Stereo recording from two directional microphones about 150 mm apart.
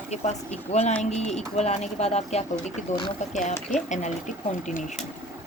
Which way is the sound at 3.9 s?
55° left (ahead or behind).